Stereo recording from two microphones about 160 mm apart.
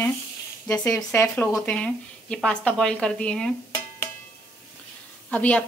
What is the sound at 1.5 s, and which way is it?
Speech, 5° left (ahead or behind).